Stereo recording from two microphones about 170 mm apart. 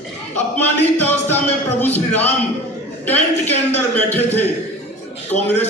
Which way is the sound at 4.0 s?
10° left (ahead or behind).